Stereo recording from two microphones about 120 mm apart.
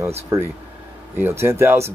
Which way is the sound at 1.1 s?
20° right (ahead or behind).